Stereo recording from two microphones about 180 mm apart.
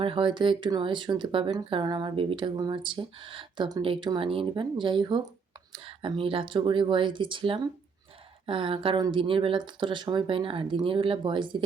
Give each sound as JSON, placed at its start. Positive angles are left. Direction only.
{"t": 0.0, "sound": "speech", "side_deg": -30}